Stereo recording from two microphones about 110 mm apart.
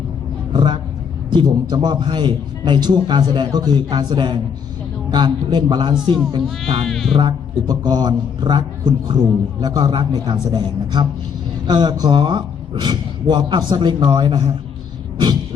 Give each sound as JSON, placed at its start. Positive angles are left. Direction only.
{"t": 0.5, "sound": "a sound", "side_deg": -50}
{"t": 1.3, "sound": "a man's voice", "side_deg": -40}
{"t": 6.8, "sound": "music", "side_deg": 0}
{"t": 7.2, "sound": "a man's voice", "side_deg": -40}